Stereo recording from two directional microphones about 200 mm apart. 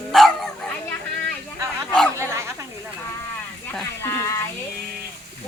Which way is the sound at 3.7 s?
10° left (ahead or behind).